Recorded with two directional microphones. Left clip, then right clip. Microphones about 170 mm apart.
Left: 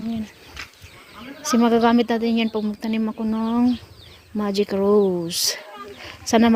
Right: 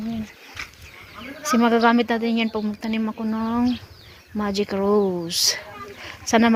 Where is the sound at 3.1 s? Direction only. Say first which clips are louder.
Left 1 dB; 25° left (ahead or behind).